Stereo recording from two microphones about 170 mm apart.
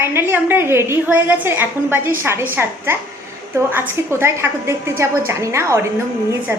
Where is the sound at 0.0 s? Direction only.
15° right (ahead or behind).